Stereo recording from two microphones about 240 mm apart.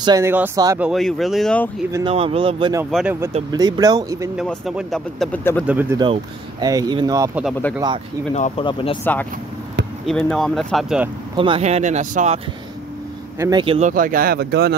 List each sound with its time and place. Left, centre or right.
0.0 s speech: centre
0.8 s speech: centre
1.9 s speech: centre
2.1 s speech: right
2.9 s speech: centre
3.5 s speech: centre
4.4 s speech: centre
5.7 s speech: centre
8.4 s speech: left
9.0 s speech: centre
11.3 s speech: right
13.4 s speech: centre; by 14.7 s right